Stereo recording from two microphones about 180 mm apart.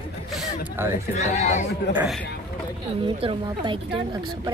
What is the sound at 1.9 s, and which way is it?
Speech, 10° right (ahead or behind).